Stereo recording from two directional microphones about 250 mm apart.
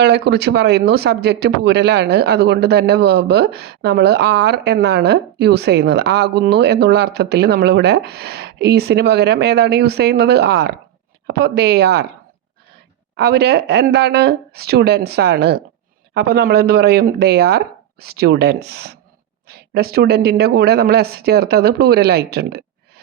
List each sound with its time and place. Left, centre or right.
0.0 s speech: right
13.1 s speech: right